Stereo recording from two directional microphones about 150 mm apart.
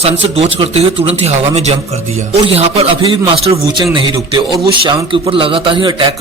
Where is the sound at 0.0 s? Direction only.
45° right (ahead or behind).